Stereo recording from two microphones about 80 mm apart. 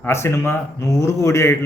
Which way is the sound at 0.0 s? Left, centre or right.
Left.